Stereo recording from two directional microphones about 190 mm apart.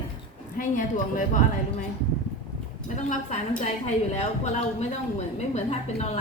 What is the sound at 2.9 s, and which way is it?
A woman's voice, 40° left (ahead or behind).